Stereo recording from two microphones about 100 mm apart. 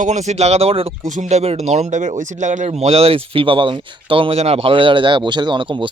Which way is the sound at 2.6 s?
90° right.